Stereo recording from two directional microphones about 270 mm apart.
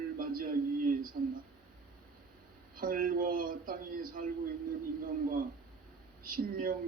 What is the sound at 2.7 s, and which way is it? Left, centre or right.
Speech, right.